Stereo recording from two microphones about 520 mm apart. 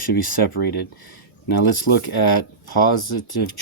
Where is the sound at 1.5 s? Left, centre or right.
Left.